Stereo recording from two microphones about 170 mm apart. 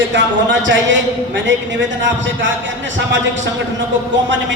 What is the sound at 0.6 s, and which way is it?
A man's voice, 90° right.